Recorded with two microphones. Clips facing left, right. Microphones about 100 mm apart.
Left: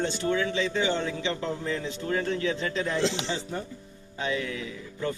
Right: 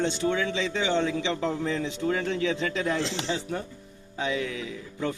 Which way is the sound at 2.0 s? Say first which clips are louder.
Right 1 dB; 5° right (ahead or behind).